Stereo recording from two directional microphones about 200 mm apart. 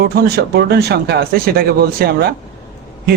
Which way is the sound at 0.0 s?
50° right (ahead or behind).